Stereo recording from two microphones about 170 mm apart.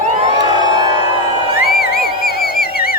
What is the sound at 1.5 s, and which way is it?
Music, 60° left (ahead or behind).